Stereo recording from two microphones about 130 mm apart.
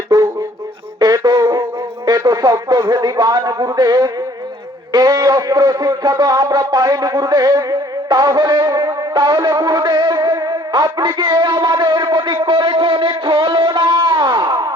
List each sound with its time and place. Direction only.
0.1 s music: 35° right (ahead or behind)
0.9 s a sound: 35° right (ahead or behind)
2.9 s speech: 35° right (ahead or behind)
4.9 s music: 30° right (ahead or behind)
10.9 s a man's voice: 40° right (ahead or behind)